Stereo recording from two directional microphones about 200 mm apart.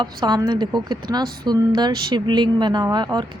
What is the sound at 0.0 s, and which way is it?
A woman's voice, 20° right (ahead or behind).